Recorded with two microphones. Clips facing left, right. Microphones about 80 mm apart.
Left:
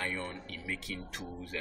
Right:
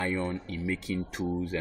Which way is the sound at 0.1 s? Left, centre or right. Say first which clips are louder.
Right 8 dB; right.